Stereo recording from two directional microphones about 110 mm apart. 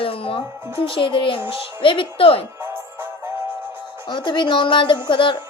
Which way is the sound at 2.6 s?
20° right (ahead or behind).